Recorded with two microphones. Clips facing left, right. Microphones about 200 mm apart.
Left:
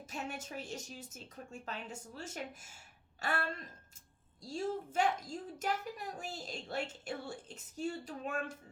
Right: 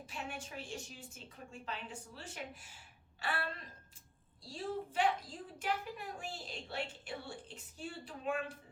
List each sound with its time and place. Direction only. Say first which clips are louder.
0.0 s a woman's voice: left 3 dB; 45° left (ahead or behind)